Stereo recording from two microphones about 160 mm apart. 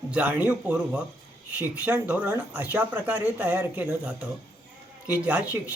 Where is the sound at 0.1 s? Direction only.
10° right (ahead or behind).